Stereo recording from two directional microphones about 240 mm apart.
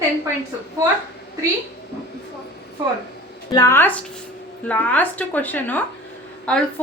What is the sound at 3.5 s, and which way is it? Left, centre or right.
A woman's voice, centre.